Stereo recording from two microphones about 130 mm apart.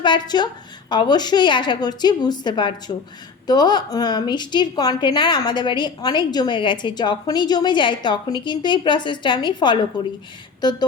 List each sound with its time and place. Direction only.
0.0 s a woman's voice: 35° left (ahead or behind)